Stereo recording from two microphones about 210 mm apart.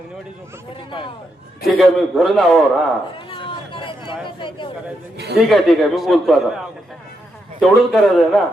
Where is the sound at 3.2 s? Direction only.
25° left (ahead or behind).